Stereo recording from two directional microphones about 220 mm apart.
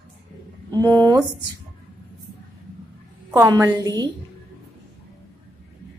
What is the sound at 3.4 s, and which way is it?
Speech, 15° right (ahead or behind).